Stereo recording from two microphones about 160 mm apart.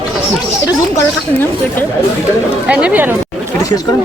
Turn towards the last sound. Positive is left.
turn(degrees=-10)  # may be behind; listen again after turning